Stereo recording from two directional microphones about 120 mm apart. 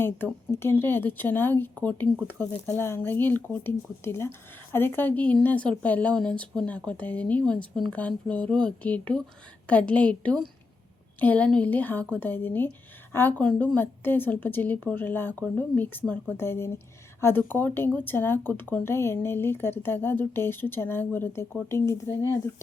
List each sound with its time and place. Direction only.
0.5 s a woman's voice: 20° left (ahead or behind)